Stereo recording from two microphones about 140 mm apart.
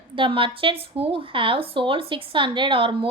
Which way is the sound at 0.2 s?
40° right (ahead or behind).